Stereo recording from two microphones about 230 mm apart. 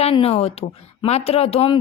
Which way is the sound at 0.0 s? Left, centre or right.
Left.